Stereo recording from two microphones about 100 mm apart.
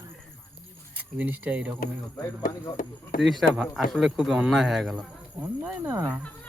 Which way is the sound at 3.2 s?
Centre (ahead or behind).